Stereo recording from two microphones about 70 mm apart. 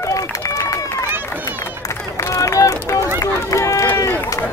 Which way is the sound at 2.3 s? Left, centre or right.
Left.